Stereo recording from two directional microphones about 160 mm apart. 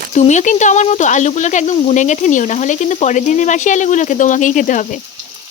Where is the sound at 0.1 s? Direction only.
45° left (ahead or behind).